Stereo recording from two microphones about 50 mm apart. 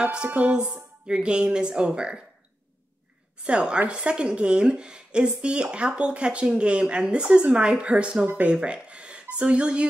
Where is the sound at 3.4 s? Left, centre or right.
Right.